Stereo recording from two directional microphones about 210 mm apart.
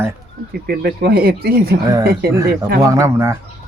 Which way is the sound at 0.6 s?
50° right (ahead or behind).